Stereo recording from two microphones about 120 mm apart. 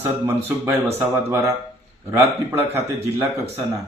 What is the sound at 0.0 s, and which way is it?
Speech, 20° right (ahead or behind).